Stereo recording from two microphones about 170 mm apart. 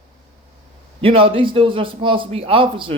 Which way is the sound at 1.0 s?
30° right (ahead or behind).